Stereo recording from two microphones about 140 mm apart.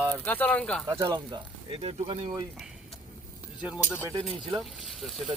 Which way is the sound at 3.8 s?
15° left (ahead or behind).